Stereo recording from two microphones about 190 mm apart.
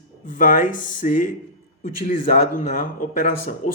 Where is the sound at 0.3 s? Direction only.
45° left (ahead or behind).